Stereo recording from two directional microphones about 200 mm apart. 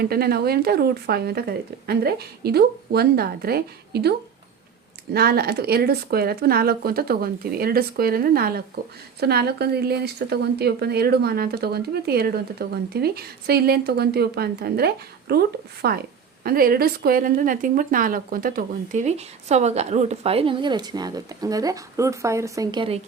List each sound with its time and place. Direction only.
0.0 s speech: 50° right (ahead or behind)
5.1 s a woman's voice: 50° right (ahead or behind); by 23.0 s 25° right (ahead or behind)